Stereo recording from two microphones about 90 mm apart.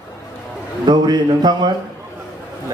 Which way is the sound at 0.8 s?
50° right (ahead or behind).